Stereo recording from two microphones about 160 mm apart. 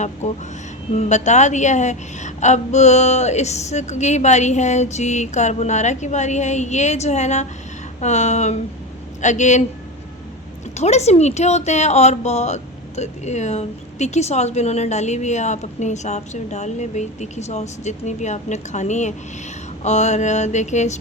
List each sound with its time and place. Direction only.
0.2 s speech: 45° left (ahead or behind)
10.8 s speech: 45° left (ahead or behind)